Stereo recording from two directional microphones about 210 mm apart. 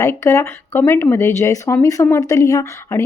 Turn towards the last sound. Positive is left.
turn(degrees=15)  # may be behind; listen again after turning